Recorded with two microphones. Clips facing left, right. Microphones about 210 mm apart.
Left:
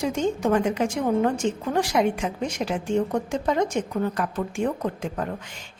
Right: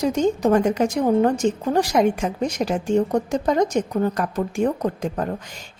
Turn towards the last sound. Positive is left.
turn(degrees=-40)  # may be behind; listen again after turning